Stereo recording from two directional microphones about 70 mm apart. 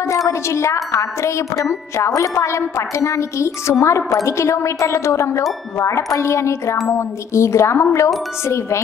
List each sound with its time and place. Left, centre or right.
0.3 s a woman's voice: left